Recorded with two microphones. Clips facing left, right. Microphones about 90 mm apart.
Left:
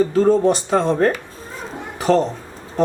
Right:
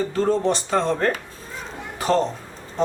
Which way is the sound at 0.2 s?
5° left (ahead or behind).